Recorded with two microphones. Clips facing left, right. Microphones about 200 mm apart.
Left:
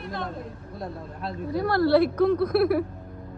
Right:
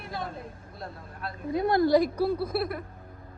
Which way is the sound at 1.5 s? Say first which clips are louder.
Left 1 dB; 20° right (ahead or behind).